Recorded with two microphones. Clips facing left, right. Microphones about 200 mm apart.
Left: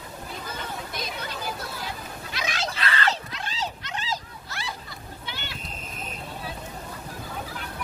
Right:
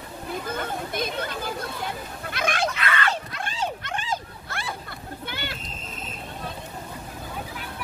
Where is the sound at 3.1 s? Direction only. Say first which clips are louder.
Right 3 dB; 55° right (ahead or behind).